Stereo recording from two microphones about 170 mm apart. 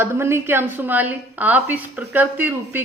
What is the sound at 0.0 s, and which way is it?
Speech, 15° right (ahead or behind).